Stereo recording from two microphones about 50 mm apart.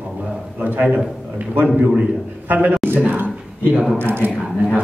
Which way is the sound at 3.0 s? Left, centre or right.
Right.